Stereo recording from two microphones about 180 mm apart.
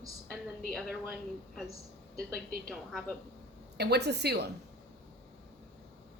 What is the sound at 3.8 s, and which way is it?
Speech, 65° right (ahead or behind).